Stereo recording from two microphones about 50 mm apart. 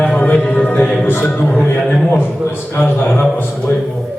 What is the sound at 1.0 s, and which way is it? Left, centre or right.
Music, left.